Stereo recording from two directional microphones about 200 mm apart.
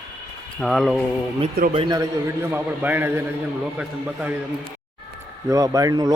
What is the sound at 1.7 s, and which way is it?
Speech, 25° right (ahead or behind).